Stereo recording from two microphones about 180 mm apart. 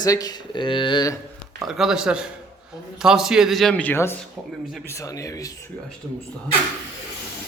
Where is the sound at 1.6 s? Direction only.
5° right (ahead or behind); by 5.5 s 15° left (ahead or behind).